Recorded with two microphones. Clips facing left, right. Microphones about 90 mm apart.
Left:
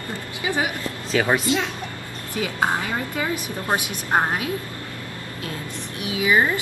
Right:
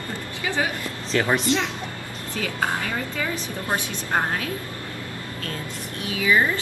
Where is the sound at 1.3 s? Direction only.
5° left (ahead or behind).